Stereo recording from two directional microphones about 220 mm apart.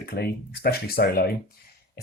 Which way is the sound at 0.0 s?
45° left (ahead or behind).